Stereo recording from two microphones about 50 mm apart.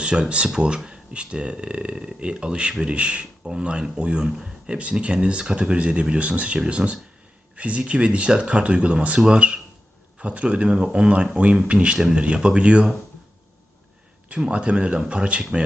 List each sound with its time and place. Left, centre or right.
0.0 s speech: centre
14.3 s speech: right